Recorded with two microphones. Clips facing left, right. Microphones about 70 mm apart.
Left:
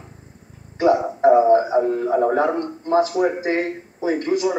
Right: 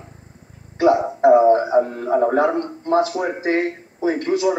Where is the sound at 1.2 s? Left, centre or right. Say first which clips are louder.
Right 2 dB; centre.